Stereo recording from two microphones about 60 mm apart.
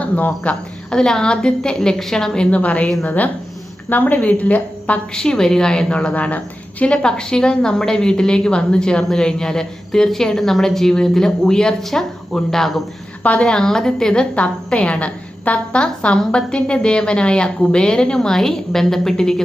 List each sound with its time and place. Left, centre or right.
0.0 s a woman's voice: left
0.9 s a woman's voice: centre
5.1 s a woman's voice: centre
13.2 s a woman's voice: centre